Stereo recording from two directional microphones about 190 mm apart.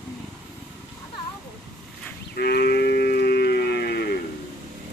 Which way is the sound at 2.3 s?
55° left (ahead or behind).